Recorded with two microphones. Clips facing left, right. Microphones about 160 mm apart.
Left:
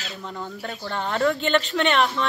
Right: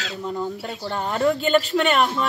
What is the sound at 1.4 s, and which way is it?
Speech, 5° right (ahead or behind).